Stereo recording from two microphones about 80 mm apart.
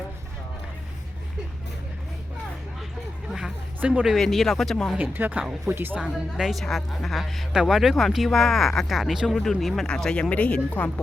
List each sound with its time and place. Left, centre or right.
3.8 s speech: centre
4.0 s speech: centre
4.9 s speech: right
6.0 s speech: centre